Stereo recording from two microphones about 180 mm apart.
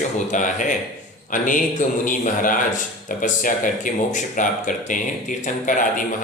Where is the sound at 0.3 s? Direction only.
45° left (ahead or behind).